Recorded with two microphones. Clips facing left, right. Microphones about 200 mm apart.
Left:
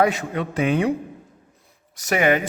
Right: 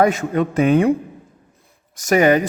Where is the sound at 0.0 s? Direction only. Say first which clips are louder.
Right 4 dB; 45° right (ahead or behind).